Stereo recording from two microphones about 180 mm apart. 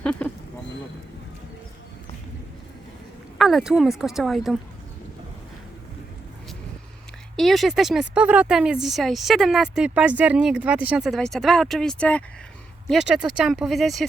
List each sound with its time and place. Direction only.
0.0 s a sound: 5° left (ahead or behind)
3.3 s speech: centre (ahead or behind)
7.3 s speech: centre (ahead or behind)